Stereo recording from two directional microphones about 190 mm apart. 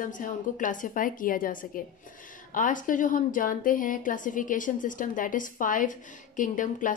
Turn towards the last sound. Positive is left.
turn(degrees=45)  # may be behind; listen again after turning